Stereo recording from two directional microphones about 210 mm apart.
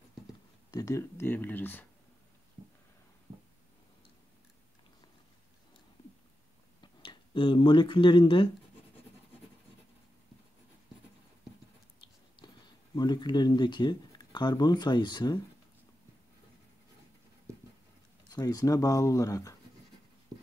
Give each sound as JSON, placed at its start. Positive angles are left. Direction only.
{"t": 0.7, "sound": "speech", "side_deg": 15}
{"t": 6.8, "sound": "speech", "side_deg": 25}
{"t": 12.9, "sound": "speech", "side_deg": 20}
{"t": 18.3, "sound": "speech", "side_deg": 15}